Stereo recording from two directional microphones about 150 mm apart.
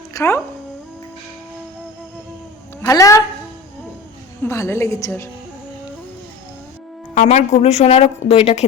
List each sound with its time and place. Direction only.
0.1 s speech: 20° left (ahead or behind)
2.8 s a woman's voice: 20° left (ahead or behind)
4.4 s a woman's voice: 20° left (ahead or behind)
7.1 s a woman's voice: 50° left (ahead or behind)